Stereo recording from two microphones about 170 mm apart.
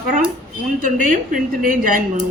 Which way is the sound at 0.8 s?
50° right (ahead or behind).